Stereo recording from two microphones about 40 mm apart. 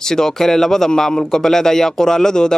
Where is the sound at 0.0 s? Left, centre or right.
Centre.